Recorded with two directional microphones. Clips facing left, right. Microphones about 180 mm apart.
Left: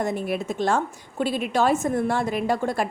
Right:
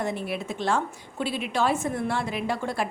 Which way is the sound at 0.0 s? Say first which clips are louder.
Left 4 dB; 45° left (ahead or behind).